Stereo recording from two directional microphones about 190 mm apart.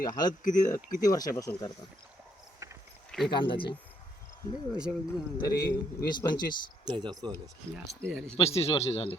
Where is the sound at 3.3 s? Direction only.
25° left (ahead or behind).